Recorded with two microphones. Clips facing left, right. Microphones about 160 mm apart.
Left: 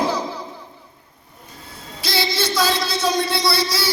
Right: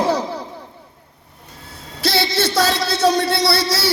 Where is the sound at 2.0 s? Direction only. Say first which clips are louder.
Right 4 dB; 70° right (ahead or behind).